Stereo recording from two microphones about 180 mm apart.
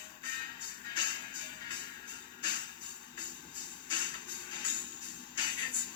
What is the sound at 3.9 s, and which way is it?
Music, 25° left (ahead or behind).